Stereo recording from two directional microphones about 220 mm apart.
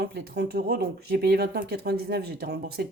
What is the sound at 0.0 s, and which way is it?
Speech, 50° right (ahead or behind).